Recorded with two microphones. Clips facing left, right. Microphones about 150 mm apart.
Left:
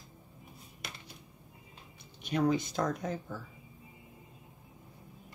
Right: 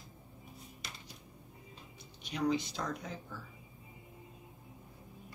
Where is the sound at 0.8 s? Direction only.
55° left (ahead or behind).